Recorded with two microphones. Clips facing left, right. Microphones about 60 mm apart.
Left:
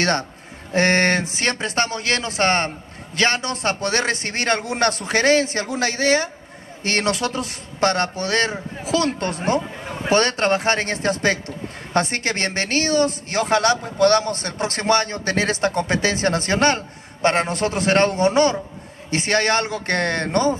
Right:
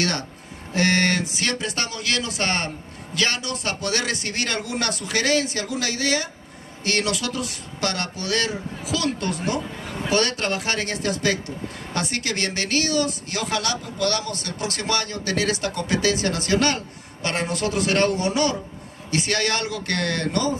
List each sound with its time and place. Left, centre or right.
0.0 s a man's voice: left